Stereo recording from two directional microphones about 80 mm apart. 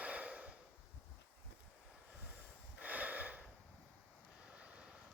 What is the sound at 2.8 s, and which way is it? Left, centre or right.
Gasp, centre.